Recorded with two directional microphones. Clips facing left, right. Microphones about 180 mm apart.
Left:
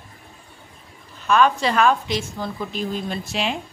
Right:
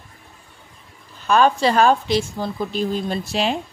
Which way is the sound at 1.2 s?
35° right (ahead or behind).